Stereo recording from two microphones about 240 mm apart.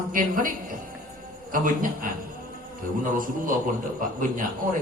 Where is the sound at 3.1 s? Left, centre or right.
Right.